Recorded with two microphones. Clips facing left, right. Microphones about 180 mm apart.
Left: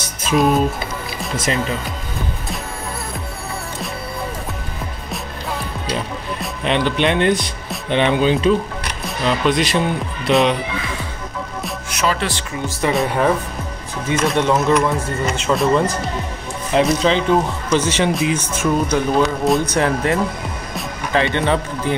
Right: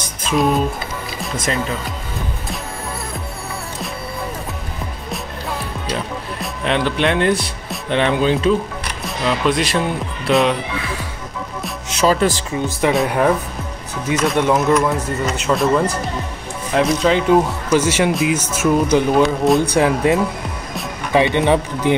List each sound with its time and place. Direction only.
0.2 s speech: centre (ahead or behind)
6.4 s speech: centre (ahead or behind)
11.9 s speech: 35° right (ahead or behind)
12.9 s speech: 5° right (ahead or behind)
18.9 s speech: 20° right (ahead or behind)
19.2 s speech: centre (ahead or behind)
19.7 s speech: 15° right (ahead or behind)